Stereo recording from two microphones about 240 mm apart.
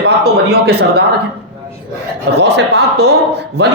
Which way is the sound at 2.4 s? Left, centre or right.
Right.